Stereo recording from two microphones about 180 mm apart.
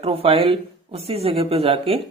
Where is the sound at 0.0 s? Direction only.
30° right (ahead or behind).